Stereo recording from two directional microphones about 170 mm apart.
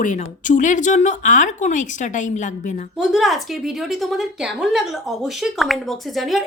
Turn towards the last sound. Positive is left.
turn(degrees=0)  # may be behind; listen again after turning